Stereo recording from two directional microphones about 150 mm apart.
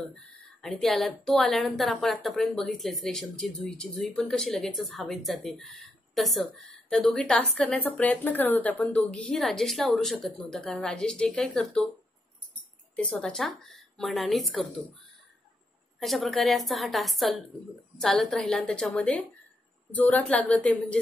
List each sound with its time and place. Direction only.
0.0 s a woman's voice: 5° left (ahead or behind)
12.9 s a woman's voice: 5° left (ahead or behind)
16.0 s a woman's voice: centre (ahead or behind)